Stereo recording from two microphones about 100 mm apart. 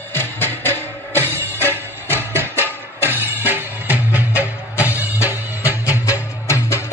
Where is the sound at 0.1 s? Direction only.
20° left (ahead or behind).